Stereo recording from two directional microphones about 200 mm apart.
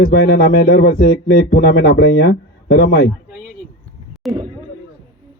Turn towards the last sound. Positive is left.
turn(degrees=0)  # may be behind; listen again after turning